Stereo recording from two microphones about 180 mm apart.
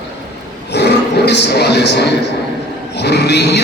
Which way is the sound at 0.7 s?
70° left (ahead or behind).